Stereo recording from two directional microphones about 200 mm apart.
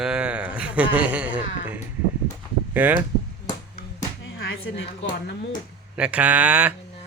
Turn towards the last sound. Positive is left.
turn(degrees=-5)  # may be behind; listen again after turning